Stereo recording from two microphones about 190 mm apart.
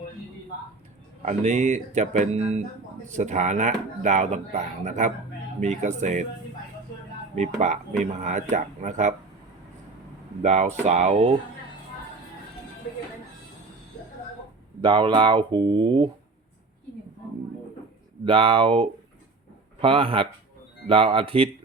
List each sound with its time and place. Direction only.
1.2 s speech: 40° right (ahead or behind)
7.3 s speech: 40° right (ahead or behind)
10.4 s speech: 35° right (ahead or behind)
14.8 s speech: 25° right (ahead or behind)
18.3 s speech: 30° right (ahead or behind)